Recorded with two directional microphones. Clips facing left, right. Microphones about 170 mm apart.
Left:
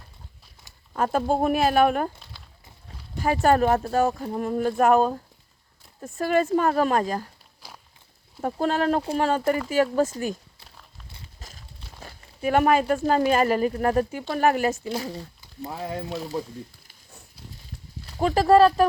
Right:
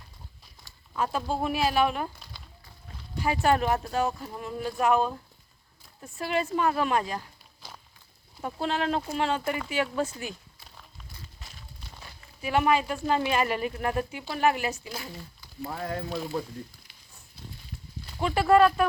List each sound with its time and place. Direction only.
0.9 s speech: 50° left (ahead or behind)
3.2 s speech: 45° left (ahead or behind)
7.6 s walk: 10° left (ahead or behind)
8.4 s speech: 45° left (ahead or behind)
11.3 s walk: 40° left (ahead or behind)
12.0 s speech: 45° left (ahead or behind)
14.8 s speech: 35° left (ahead or behind)
15.4 s frying: 20° left (ahead or behind)
16.0 s speech: centre (ahead or behind)
18.2 s speech: 35° left (ahead or behind)